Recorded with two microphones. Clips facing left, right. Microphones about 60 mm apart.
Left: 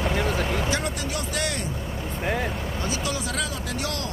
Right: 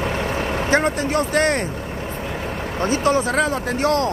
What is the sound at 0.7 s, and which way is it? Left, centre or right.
Speech, right.